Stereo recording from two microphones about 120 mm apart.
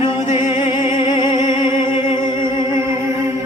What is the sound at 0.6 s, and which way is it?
Music, 45° left (ahead or behind).